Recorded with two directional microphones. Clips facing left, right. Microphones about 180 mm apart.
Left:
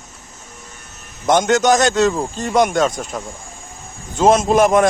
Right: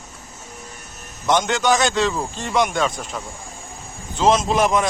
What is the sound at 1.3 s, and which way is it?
A man's voice, 45° left (ahead or behind).